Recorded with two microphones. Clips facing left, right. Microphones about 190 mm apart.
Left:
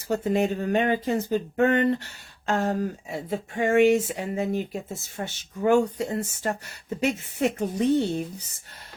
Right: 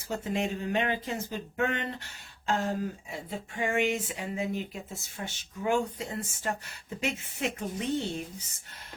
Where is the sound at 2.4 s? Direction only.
65° left (ahead or behind).